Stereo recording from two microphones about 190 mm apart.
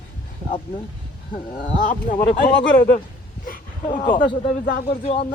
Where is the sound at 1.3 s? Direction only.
45° left (ahead or behind).